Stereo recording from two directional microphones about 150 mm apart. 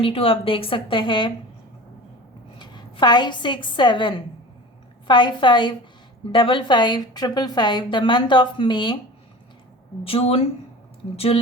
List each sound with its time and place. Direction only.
0.0 s a woman's voice: 40° left (ahead or behind)
2.6 s a woman's voice: 30° left (ahead or behind)
10.0 s a woman's voice: 40° left (ahead or behind)